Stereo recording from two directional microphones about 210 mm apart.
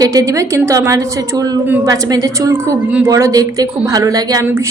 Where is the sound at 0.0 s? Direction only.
15° right (ahead or behind).